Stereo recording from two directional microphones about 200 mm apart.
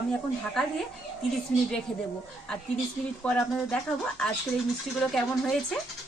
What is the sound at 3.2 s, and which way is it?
Speech, 5° left (ahead or behind).